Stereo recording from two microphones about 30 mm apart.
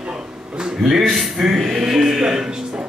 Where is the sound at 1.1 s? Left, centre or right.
Centre.